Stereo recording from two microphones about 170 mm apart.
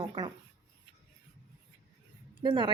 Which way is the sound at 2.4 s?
25° right (ahead or behind).